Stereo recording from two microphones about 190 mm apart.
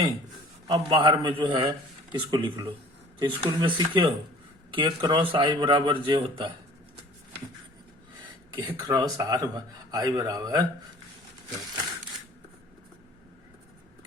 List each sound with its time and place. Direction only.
0.7 s speech: 20° right (ahead or behind)
8.5 s speech: 20° right (ahead or behind)